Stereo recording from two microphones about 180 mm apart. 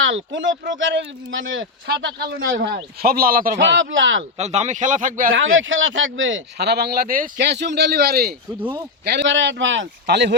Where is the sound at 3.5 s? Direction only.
85° right.